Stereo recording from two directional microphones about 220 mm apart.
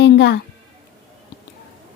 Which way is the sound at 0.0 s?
50° left (ahead or behind).